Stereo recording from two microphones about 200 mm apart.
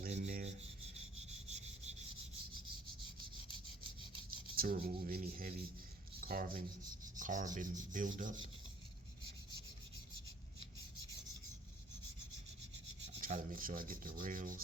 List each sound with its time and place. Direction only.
0.0 s rub: 40° right (ahead or behind)
4.5 s rub: 45° right (ahead or behind)
6.1 s speech: 45° right (ahead or behind)
7.2 s rub: 40° right (ahead or behind)
13.2 s rub: 40° right (ahead or behind)